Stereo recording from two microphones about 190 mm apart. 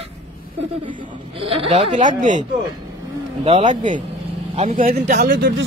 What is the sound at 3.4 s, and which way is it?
Speech, 35° right (ahead or behind).